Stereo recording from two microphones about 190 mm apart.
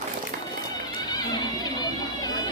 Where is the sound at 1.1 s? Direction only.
20° left (ahead or behind).